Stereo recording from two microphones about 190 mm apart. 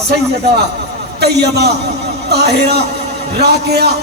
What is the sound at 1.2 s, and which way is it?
A man's voice, 60° right (ahead or behind).